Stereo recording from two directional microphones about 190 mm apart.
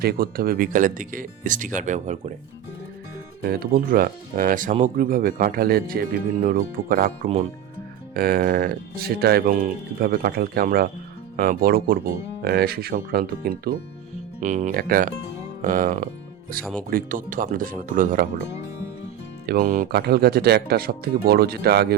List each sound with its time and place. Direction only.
0.0 s speech: 50° right (ahead or behind)
3.4 s speech: 50° right (ahead or behind)
14.4 s speech: 40° right (ahead or behind)
19.5 s speech: 45° right (ahead or behind)